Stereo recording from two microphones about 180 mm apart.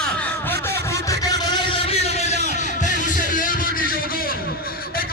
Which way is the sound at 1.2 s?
20° left (ahead or behind).